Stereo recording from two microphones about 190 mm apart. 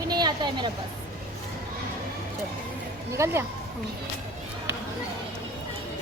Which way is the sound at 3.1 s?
15° right (ahead or behind).